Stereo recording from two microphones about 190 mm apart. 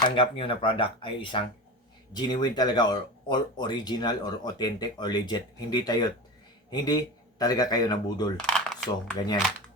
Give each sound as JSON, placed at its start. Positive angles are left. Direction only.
{"t": 0.0, "sound": "speech", "side_deg": 30}
{"t": 8.5, "sound": "a sound", "side_deg": 0}
{"t": 9.1, "sound": "speech", "side_deg": 20}